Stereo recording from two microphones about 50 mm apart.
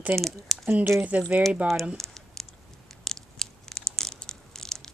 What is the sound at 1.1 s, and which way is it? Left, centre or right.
Speech, right.